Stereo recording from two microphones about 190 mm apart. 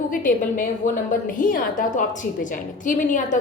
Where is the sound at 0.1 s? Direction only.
45° left (ahead or behind).